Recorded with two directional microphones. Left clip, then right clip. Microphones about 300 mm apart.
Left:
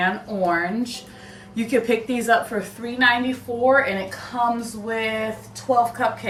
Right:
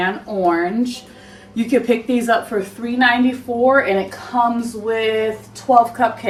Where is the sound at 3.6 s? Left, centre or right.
Centre.